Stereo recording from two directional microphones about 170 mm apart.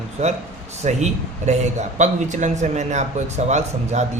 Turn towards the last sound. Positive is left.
turn(degrees=-40)  # may be behind; listen again after turning